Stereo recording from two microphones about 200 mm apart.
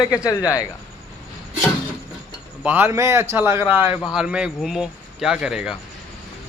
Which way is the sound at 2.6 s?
10° right (ahead or behind).